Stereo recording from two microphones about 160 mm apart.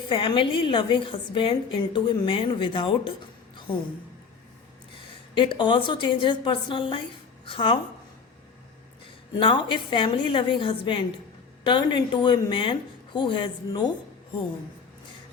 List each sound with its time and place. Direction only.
0.1 s a woman's voice: 30° left (ahead or behind)
5.3 s a woman's voice: 30° left (ahead or behind)
9.3 s a woman's voice: 30° left (ahead or behind)